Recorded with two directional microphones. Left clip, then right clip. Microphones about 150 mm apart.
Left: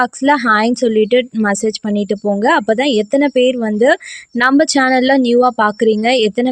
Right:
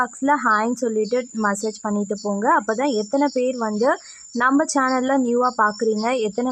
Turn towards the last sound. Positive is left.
turn(degrees=40)  # may be behind; listen again after turning